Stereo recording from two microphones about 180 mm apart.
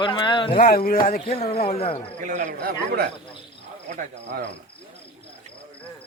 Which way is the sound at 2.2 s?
45° right (ahead or behind).